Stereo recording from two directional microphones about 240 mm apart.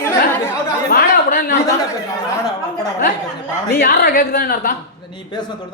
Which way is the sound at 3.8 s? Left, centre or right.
Left.